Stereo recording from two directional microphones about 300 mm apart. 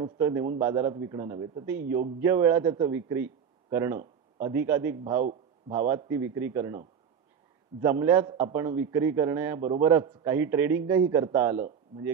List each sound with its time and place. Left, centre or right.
0.0 s a man's voice: centre
7.8 s a man's voice: centre